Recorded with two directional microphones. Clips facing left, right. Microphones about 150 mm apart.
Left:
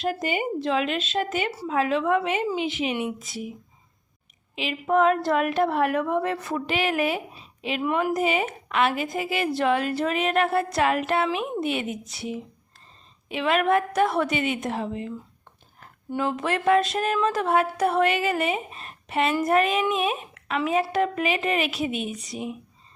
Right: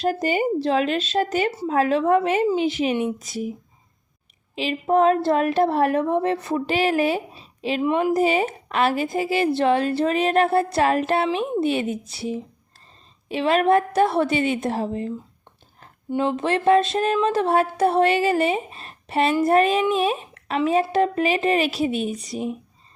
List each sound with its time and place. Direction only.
0.0 s a woman's voice: 40° right (ahead or behind)
4.5 s a woman's voice: 35° right (ahead or behind)
16.0 s a woman's voice: 25° right (ahead or behind)